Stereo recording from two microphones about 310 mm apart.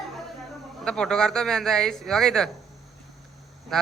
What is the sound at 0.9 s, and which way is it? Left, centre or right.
Speech, centre.